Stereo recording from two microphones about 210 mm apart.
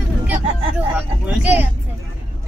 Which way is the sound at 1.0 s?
10° right (ahead or behind).